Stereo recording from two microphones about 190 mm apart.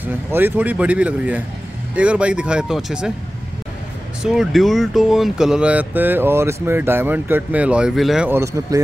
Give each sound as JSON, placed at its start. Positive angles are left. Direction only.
{"t": 0.0, "sound": "speech", "side_deg": -10}
{"t": 4.2, "sound": "speech", "side_deg": 0}
{"t": 8.3, "sound": "speech", "side_deg": -15}